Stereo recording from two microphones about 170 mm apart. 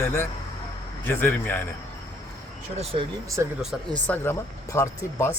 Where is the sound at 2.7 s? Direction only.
35° right (ahead or behind).